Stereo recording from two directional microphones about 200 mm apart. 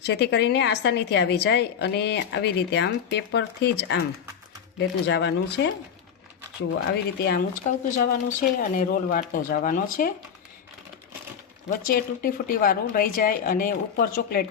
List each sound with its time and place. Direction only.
0.0 s a woman's voice: 60° left (ahead or behind)
7.9 s speech: 40° left (ahead or behind)
11.9 s speech: 45° left (ahead or behind)